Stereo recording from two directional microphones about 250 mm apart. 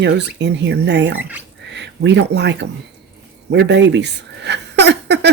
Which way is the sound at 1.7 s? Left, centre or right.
Right.